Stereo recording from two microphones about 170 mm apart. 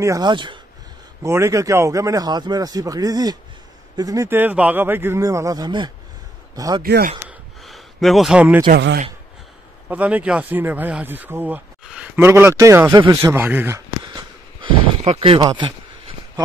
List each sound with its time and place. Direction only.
0.0 s a man's voice: 20° right (ahead or behind)
1.2 s a man's voice: 15° right (ahead or behind)
6.8 s speech: 60° right (ahead or behind)
7.2 s a sound: centre (ahead or behind)
8.6 s speech: 65° right (ahead or behind)
9.8 s speech: 10° right (ahead or behind)
13.1 s a sound: 15° right (ahead or behind)
15.0 s speech: 40° right (ahead or behind)